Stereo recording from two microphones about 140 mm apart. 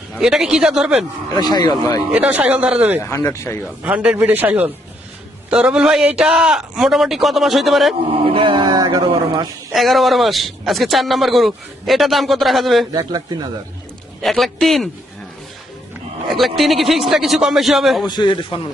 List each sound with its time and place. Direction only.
0.2 s speech: 5° right (ahead or behind)
1.3 s speech: 30° left (ahead or behind)
2.1 s speech: 10° right (ahead or behind)
3.0 s speech: 20° left (ahead or behind)
3.6 s speech: 10° right (ahead or behind)
8.3 s speech: 35° right (ahead or behind)
9.0 s a sound: 35° right (ahead or behind)
9.7 s speech: centre (ahead or behind)
12.9 s speech: 30° right (ahead or behind)
14.2 s speech: centre (ahead or behind)
16.4 s speech: centre (ahead or behind)
18.0 s a man's voice: 30° left (ahead or behind)